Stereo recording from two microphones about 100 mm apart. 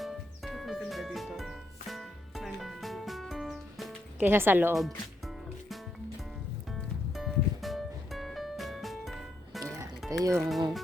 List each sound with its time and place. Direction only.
0.0 s music: centre (ahead or behind)
4.2 s speech: 20° right (ahead or behind)
5.2 s music: centre (ahead or behind)
10.1 s speech: 35° right (ahead or behind)